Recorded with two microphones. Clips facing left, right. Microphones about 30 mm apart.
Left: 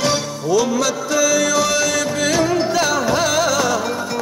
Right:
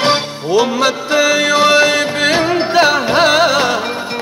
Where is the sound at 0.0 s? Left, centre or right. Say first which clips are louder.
Right 5 dB; right.